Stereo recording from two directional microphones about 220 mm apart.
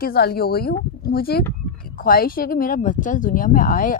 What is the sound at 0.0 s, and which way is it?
Speech, 45° left (ahead or behind).